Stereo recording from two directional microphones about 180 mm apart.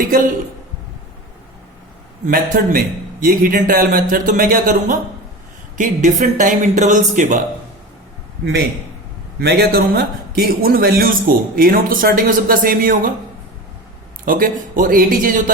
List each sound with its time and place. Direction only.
2.2 s speech: 50° right (ahead or behind)
9.4 s a man's voice: 65° right (ahead or behind)
14.3 s speech: 50° right (ahead or behind)